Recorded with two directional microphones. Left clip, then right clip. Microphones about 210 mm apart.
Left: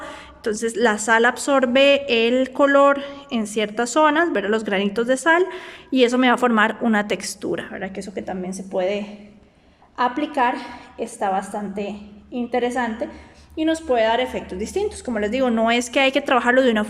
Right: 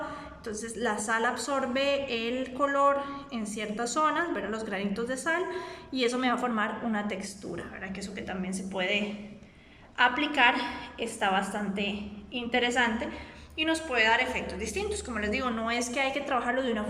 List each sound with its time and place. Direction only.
0.4 s a woman's voice: 45° left (ahead or behind)